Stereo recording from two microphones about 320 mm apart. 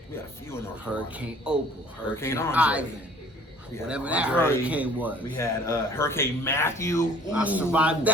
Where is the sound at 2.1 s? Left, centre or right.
Centre.